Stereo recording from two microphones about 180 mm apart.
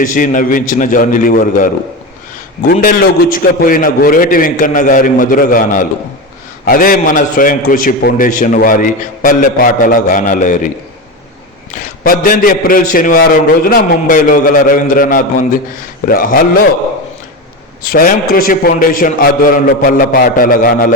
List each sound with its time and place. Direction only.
0.0 s a man's voice: 45° left (ahead or behind)
2.8 s a man's voice: 50° left (ahead or behind)
11.7 s a man's voice: 45° left (ahead or behind)
17.8 s a man's voice: 50° left (ahead or behind)